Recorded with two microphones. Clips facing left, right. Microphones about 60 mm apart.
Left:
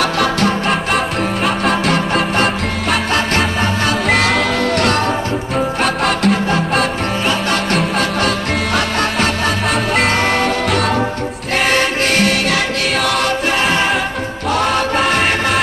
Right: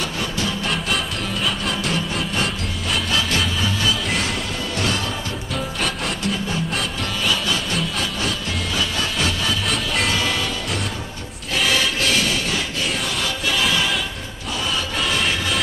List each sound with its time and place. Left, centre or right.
0.0 s music: left
4.2 s music: left
13.6 s music: left
14.6 s music: left